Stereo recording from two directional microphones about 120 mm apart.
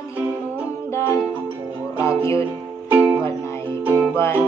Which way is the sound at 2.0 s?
25° left (ahead or behind).